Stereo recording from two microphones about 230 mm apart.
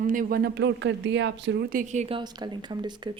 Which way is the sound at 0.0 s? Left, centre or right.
Right.